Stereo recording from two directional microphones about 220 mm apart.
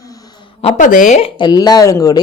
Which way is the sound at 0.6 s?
30° left (ahead or behind).